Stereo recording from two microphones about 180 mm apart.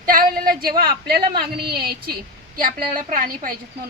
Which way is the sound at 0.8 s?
55° right (ahead or behind).